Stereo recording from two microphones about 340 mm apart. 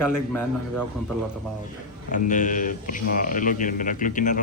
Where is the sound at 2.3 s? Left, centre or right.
Left.